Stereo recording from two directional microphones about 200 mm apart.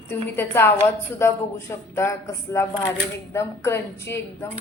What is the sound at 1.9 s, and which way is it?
A woman's voice, 15° left (ahead or behind).